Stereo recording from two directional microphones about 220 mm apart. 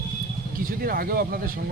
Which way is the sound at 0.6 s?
40° right (ahead or behind).